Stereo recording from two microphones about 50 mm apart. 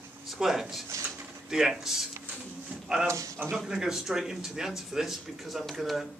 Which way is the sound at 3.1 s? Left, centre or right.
Right.